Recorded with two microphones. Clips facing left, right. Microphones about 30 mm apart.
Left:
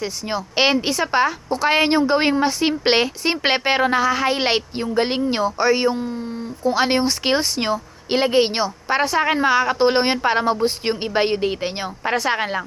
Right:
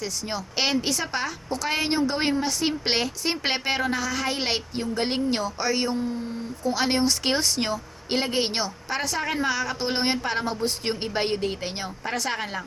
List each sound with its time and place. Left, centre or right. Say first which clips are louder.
0.0 s a woman's voice: left 5 dB; left